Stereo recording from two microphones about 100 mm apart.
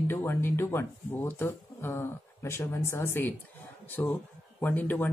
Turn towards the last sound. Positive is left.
turn(degrees=15)  # may be behind; listen again after turning